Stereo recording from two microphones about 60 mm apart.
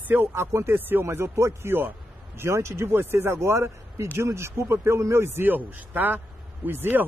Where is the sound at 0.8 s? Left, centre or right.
Right.